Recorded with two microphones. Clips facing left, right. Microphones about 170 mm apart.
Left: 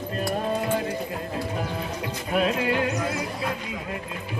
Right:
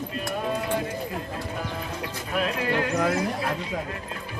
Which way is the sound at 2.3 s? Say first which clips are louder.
Left 4 dB; 25° left (ahead or behind).